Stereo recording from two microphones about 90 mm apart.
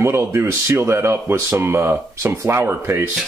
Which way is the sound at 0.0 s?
30° right (ahead or behind).